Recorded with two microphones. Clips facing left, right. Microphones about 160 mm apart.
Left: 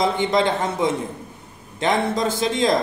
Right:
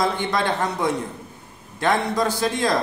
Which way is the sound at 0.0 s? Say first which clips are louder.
Left 3 dB; 20° left (ahead or behind).